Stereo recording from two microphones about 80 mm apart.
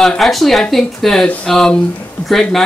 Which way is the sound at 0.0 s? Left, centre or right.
Centre.